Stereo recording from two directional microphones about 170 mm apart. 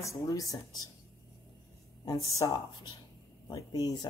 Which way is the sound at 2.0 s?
20° left (ahead or behind).